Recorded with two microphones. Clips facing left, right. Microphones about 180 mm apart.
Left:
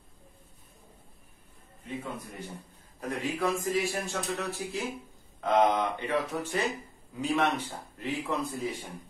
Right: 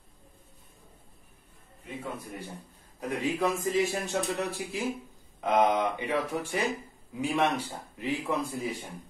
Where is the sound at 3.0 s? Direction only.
15° right (ahead or behind).